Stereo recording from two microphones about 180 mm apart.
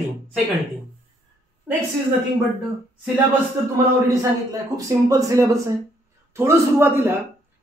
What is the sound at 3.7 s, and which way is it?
Speech, 20° right (ahead or behind).